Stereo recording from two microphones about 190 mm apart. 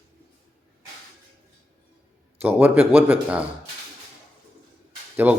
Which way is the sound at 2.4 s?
10° right (ahead or behind).